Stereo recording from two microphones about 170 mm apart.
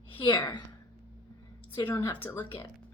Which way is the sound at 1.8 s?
15° left (ahead or behind).